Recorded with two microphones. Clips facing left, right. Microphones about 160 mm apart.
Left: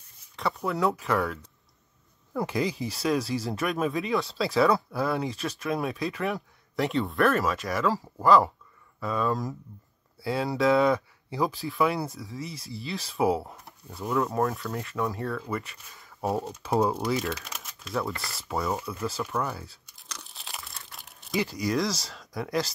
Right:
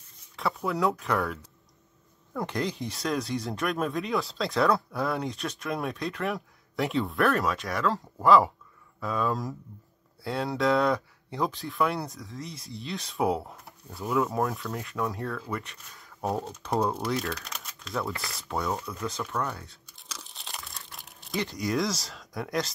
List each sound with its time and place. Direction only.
0.4 s speech: centre (ahead or behind)